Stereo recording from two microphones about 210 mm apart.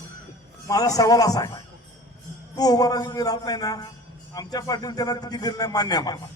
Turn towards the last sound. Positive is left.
turn(degrees=20)  # may be behind; listen again after turning